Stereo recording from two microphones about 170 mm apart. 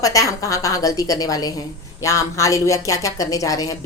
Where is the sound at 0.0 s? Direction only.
20° left (ahead or behind).